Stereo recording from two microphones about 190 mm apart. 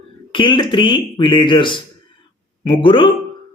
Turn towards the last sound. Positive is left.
turn(degrees=25)  # may be behind; listen again after turning